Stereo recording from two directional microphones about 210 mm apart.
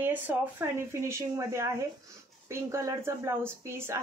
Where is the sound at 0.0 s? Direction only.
10° right (ahead or behind).